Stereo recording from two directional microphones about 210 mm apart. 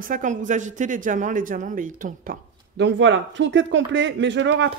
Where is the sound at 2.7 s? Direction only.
60° right (ahead or behind).